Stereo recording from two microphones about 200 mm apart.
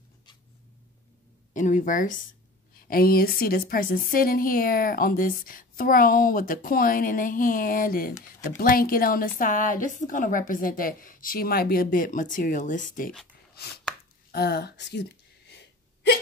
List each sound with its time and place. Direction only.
1.5 s a woman's voice: 40° left (ahead or behind)
13.6 s chopping: 50° left (ahead or behind)
14.3 s a woman's voice: 55° left (ahead or behind)